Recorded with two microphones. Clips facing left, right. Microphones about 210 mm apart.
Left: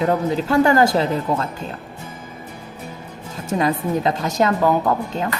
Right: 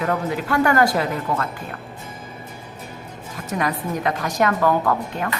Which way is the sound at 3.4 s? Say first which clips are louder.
Left 4 dB; 25° left (ahead or behind).